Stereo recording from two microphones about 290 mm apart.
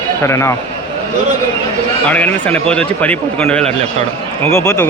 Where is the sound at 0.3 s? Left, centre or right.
Centre.